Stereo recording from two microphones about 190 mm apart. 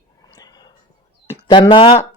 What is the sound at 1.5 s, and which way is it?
Speech, 25° left (ahead or behind).